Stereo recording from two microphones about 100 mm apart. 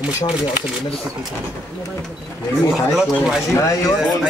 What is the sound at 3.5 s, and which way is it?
Speech, 30° left (ahead or behind).